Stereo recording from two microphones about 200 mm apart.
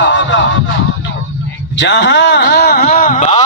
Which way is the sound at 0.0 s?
65° left (ahead or behind).